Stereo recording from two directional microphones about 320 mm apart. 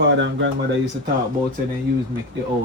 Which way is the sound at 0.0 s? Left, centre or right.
Right.